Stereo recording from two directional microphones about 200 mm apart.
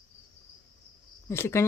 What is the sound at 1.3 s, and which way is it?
Speech, 15° left (ahead or behind).